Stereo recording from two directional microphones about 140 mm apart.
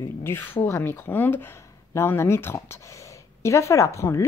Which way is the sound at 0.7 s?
15° left (ahead or behind).